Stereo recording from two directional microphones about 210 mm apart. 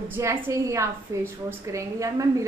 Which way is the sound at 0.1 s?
15° right (ahead or behind).